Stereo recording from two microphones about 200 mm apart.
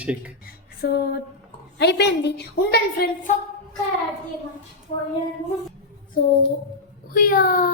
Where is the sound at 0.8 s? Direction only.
50° left (ahead or behind).